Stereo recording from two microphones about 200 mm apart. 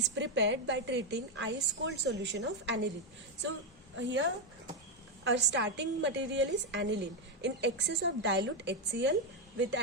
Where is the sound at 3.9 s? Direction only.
65° right (ahead or behind).